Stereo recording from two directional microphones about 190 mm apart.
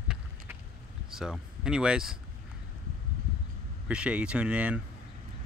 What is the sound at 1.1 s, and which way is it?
Speech, 5° right (ahead or behind).